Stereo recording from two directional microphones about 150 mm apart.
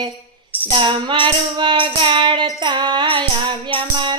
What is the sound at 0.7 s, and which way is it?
Music, 35° right (ahead or behind).